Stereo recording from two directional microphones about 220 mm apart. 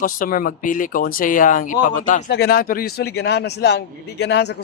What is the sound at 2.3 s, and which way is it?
A man's voice, 45° left (ahead or behind).